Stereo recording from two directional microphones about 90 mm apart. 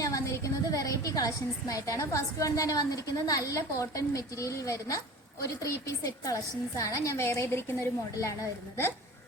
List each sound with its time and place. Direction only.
0.0 s a woman's voice: 40° left (ahead or behind)